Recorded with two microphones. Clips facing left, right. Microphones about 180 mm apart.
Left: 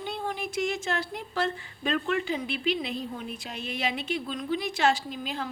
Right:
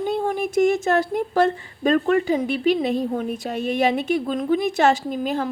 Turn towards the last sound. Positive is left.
turn(degrees=-50)  # may be behind; listen again after turning